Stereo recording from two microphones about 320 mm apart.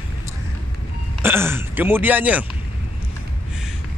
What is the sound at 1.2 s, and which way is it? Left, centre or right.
Speech, centre.